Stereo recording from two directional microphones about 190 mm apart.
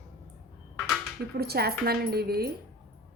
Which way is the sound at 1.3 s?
55° right (ahead or behind).